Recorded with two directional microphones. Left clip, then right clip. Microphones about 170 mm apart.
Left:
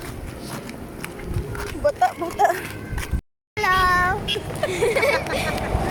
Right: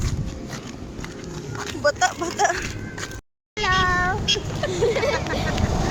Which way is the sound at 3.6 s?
25° left (ahead or behind).